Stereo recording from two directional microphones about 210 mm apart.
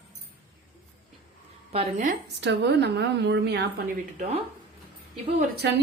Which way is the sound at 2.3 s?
55° right (ahead or behind).